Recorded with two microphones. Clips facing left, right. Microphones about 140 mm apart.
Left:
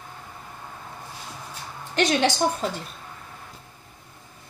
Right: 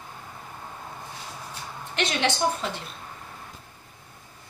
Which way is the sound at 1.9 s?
35° left (ahead or behind).